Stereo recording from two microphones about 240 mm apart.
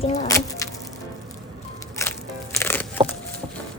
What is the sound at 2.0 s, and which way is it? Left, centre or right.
Music, centre.